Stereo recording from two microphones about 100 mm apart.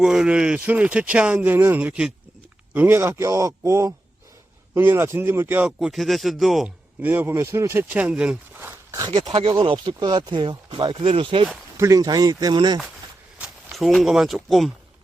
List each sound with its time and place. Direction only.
0.0 s a man's voice: 5° right (ahead or behind); by 5.6 s 25° right (ahead or behind)
5.6 s speech: 5° right (ahead or behind)
7.0 s a man's voice: 20° right (ahead or behind)
8.9 s speech: 35° right (ahead or behind)
9.1 s speech: 60° right (ahead or behind)
11.0 s speech: 70° right (ahead or behind)
11.8 s speech: 35° right (ahead or behind)
13.7 s speech: centre (ahead or behind)